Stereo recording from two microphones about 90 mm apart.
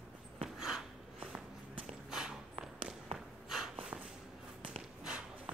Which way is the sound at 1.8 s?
5° right (ahead or behind).